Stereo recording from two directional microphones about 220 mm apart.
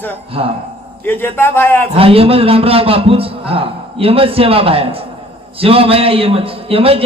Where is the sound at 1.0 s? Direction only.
10° left (ahead or behind).